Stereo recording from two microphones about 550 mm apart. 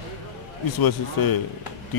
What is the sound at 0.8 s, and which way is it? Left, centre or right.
Speech, left.